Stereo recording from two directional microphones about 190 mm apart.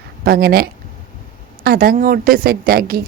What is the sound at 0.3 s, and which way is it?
A woman's voice, 55° right (ahead or behind).